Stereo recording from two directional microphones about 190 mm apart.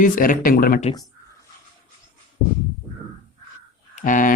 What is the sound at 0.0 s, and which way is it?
Speech, 45° left (ahead or behind).